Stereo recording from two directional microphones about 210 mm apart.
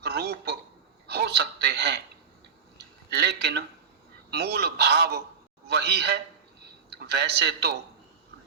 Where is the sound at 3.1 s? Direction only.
50° right (ahead or behind).